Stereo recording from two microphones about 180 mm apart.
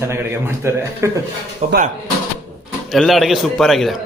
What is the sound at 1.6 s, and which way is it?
Speech, 45° right (ahead or behind).